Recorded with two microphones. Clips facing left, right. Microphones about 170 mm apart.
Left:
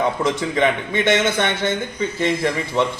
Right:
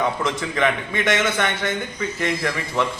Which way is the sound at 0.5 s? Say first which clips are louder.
Left 3 dB; 30° left (ahead or behind).